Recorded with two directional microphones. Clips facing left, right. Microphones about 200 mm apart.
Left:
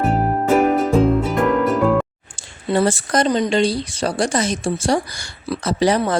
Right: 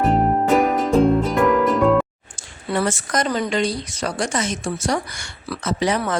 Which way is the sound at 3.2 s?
20° left (ahead or behind).